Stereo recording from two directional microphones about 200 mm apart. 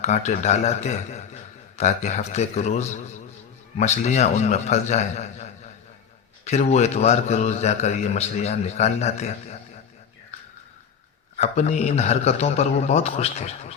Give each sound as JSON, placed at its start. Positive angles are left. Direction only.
{"t": 0.0, "sound": "a man's voice", "side_deg": 35}
{"t": 11.3, "sound": "a man's voice", "side_deg": 35}